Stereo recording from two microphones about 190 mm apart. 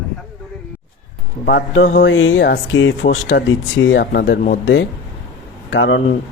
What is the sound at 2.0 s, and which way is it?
Speech, 80° left.